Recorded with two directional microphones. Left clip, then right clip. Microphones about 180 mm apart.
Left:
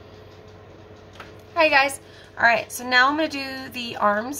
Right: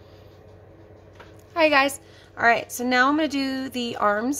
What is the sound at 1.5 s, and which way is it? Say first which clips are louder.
A woman's voice: left 1 dB; 50° right (ahead or behind).